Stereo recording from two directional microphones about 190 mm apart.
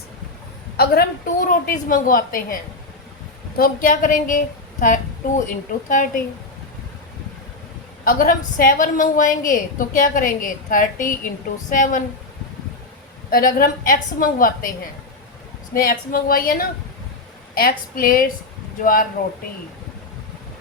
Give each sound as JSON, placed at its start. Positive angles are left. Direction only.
{"t": 0.8, "sound": "a woman's voice", "side_deg": 50}
{"t": 3.6, "sound": "a woman's voice", "side_deg": 45}
{"t": 8.0, "sound": "a woman's voice", "side_deg": 50}
{"t": 13.3, "sound": "a woman's voice", "side_deg": 50}
{"t": 15.7, "sound": "a woman's voice", "side_deg": 50}